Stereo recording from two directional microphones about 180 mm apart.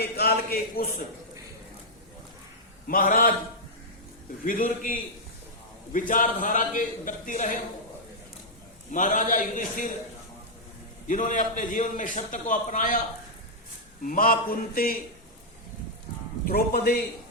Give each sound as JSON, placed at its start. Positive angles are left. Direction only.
{"t": 0.0, "sound": "speech", "side_deg": 60}
{"t": 2.8, "sound": "a man's voice", "side_deg": 50}
{"t": 4.4, "sound": "a man's voice", "side_deg": 50}
{"t": 8.9, "sound": "a man's voice", "side_deg": 45}
{"t": 11.1, "sound": "a man's voice", "side_deg": 45}
{"t": 14.0, "sound": "a man's voice", "side_deg": 50}
{"t": 16.5, "sound": "speech", "side_deg": 55}